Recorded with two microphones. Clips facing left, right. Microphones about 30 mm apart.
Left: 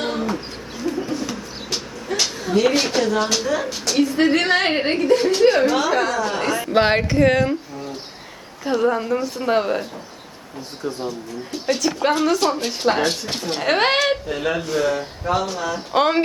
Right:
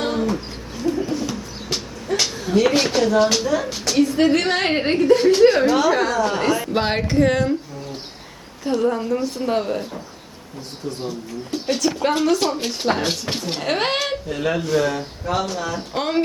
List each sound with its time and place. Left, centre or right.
0.0 s chicken: centre
3.3 s a woman's voice: centre
6.7 s a woman's voice: centre
8.6 s a woman's voice: centre
11.6 s a woman's voice: centre
12.3 s a woman's voice: centre
13.6 s a woman's voice: centre
15.9 s speech: centre